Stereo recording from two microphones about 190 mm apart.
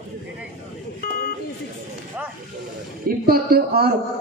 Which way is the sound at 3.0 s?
50° right (ahead or behind).